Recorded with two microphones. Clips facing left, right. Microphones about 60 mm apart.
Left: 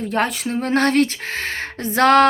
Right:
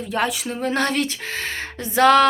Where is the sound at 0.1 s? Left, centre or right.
Left.